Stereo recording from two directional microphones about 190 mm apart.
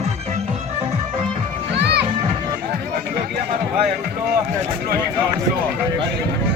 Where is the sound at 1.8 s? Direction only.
60° right (ahead or behind).